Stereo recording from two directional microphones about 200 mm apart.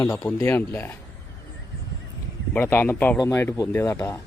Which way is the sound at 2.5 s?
10° left (ahead or behind).